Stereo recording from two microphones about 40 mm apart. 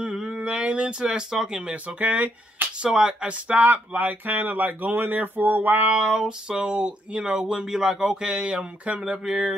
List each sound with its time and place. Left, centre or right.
0.0 s a sound: centre
0.3 s speech: right
1.7 s speech: right
2.8 s speech: centre
3.3 s speech: right
6.0 s speech: centre
8.3 s speech: right
9.2 s a sound: centre